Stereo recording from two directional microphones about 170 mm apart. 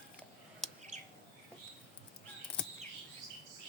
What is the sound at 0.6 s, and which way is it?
Bird, centre (ahead or behind).